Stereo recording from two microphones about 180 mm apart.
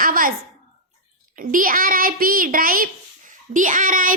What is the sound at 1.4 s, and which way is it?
A child's voice, 50° right (ahead or behind).